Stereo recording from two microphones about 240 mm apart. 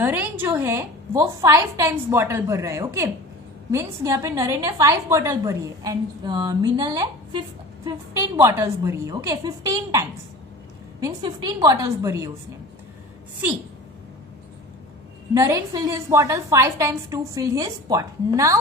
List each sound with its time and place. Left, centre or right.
0.0 s a woman's voice: centre
15.3 s a woman's voice: centre